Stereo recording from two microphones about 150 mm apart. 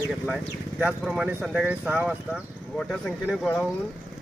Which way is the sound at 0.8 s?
5° right (ahead or behind).